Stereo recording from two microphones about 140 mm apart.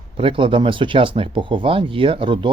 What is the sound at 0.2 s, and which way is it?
Speech, 40° right (ahead or behind).